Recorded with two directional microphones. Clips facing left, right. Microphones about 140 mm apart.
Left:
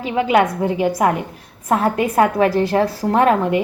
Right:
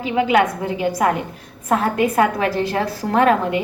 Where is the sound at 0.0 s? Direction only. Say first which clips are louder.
Left 1 dB; 35° left (ahead or behind).